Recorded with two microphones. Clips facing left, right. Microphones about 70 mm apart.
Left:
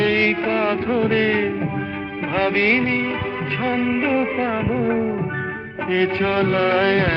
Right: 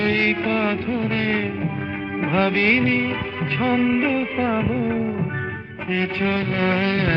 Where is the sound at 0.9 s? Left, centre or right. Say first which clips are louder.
Left 5 dB; left.